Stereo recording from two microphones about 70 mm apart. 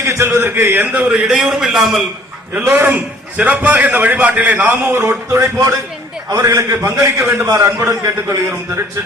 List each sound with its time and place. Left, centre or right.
0.0 s a man's voice: right
1.1 s a man's voice: centre
2.8 s a man's voice: right
5.4 s a man's voice: right
6.6 s a man's voice: right